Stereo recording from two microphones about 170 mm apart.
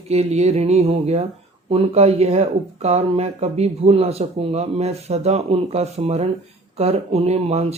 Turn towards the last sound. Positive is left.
turn(degrees=-40)  # may be behind; listen again after turning